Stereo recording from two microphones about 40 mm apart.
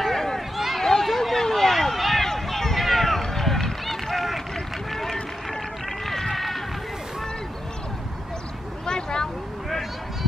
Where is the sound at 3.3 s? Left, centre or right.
Centre.